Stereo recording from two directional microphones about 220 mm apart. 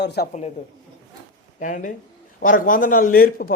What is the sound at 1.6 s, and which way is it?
A man's voice, 35° left (ahead or behind).